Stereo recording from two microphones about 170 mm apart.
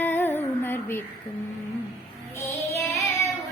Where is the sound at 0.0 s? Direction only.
10° left (ahead or behind).